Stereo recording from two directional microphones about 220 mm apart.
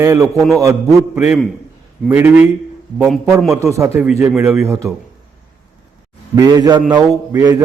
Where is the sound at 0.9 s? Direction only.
Centre (ahead or behind).